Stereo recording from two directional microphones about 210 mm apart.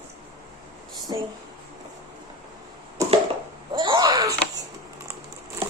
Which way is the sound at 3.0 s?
15° right (ahead or behind).